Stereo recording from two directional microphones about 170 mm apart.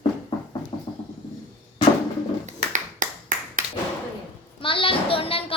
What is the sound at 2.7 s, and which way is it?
Finger snapping, 50° right (ahead or behind).